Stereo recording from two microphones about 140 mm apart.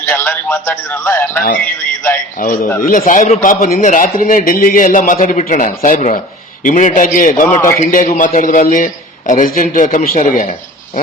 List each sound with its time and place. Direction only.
0.0 s a man's voice: 15° left (ahead or behind)
2.4 s a man's voice: 75° left (ahead or behind)